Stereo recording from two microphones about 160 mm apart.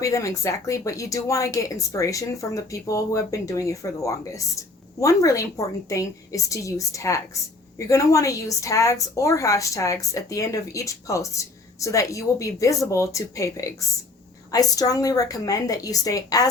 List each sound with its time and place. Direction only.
0.0 s a woman's voice: 20° left (ahead or behind)